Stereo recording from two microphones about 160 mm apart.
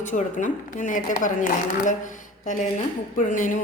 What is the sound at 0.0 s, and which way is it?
A woman's voice, 50° left (ahead or behind).